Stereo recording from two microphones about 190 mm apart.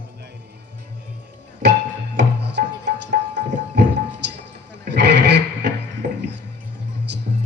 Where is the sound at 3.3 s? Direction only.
65° right (ahead or behind).